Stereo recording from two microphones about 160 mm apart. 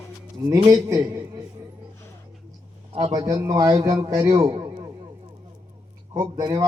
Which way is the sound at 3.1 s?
20° right (ahead or behind).